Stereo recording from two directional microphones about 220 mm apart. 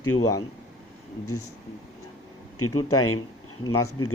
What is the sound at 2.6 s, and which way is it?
Speech, 90° left.